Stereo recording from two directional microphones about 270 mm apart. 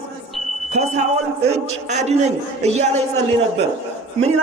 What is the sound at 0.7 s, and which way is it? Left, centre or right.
A man's voice, right.